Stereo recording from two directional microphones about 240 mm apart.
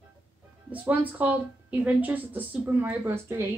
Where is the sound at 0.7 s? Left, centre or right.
Centre.